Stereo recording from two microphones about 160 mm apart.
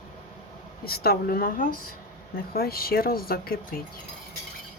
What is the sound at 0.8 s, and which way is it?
Speech, 75° left (ahead or behind).